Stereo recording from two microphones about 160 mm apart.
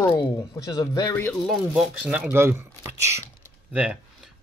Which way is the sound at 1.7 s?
5° right (ahead or behind).